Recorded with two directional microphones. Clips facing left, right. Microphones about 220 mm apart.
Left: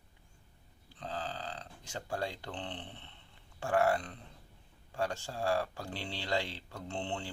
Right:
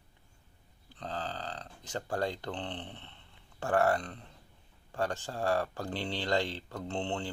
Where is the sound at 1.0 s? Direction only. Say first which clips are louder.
Right 2 dB; 10° left (ahead or behind).